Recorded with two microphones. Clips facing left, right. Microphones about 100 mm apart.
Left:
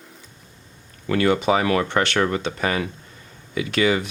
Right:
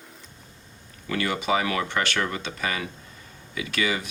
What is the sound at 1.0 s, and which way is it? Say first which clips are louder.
Speech: left 7 dB; 45° left (ahead or behind).